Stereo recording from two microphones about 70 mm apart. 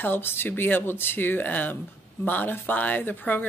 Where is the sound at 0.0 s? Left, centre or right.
Left.